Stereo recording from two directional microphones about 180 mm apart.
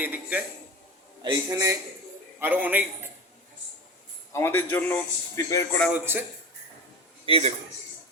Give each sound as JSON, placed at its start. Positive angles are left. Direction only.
{"t": 0.0, "sound": "a man's voice", "side_deg": -10}
{"t": 1.2, "sound": "a man's voice", "side_deg": -20}
{"t": 4.3, "sound": "a man's voice", "side_deg": 15}
{"t": 5.9, "sound": "a man's voice", "side_deg": -10}
{"t": 7.3, "sound": "a man's voice", "side_deg": -30}